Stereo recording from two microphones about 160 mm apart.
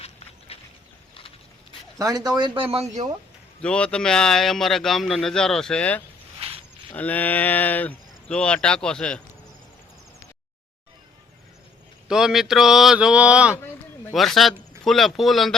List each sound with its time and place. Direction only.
0.0 s a sound: 40° left (ahead or behind)
2.0 s speech: 20° right (ahead or behind)
3.6 s a man's voice: 5° left (ahead or behind)
6.4 s a sound: 35° right (ahead or behind)
6.9 s speech: 10° left (ahead or behind)
12.0 s a man's voice: 5° right (ahead or behind)